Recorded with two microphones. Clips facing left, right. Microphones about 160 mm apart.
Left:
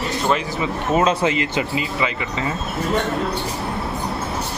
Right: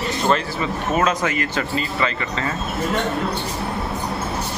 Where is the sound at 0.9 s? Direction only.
25° left (ahead or behind).